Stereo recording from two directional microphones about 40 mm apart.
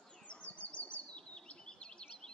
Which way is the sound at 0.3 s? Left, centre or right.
Left.